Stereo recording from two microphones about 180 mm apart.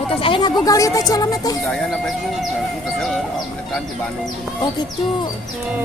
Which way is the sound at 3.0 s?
Centre (ahead or behind).